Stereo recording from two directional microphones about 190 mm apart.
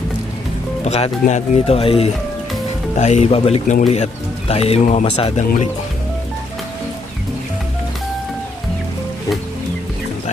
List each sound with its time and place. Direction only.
0.9 s speech: 35° left (ahead or behind)